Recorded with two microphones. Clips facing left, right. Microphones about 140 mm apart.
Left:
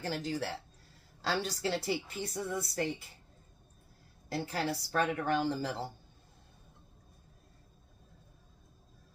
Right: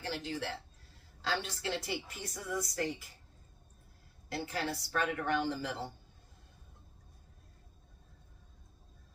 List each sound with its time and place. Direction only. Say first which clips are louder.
0.0 s a woman's voice: left 3 dB; 40° left (ahead or behind)
4.3 s a woman's voice: left 3 dB; 35° left (ahead or behind)